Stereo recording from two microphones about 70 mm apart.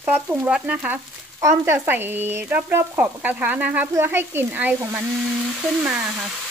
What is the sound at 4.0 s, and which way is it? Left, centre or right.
Speech, right.